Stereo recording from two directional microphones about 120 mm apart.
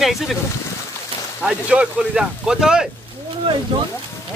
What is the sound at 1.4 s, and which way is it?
Speech, 10° right (ahead or behind).